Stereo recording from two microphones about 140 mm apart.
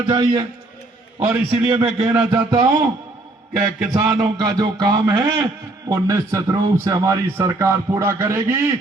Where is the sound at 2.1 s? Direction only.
30° right (ahead or behind).